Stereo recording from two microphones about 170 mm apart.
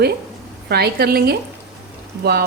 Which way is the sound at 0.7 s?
70° right (ahead or behind).